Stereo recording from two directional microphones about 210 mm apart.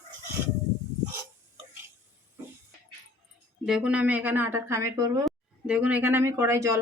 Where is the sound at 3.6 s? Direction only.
5° right (ahead or behind).